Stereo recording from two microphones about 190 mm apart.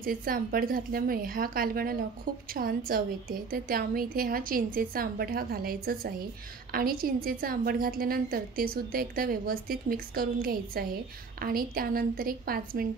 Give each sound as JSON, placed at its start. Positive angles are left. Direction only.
{"t": 0.0, "sound": "a woman's voice", "side_deg": -50}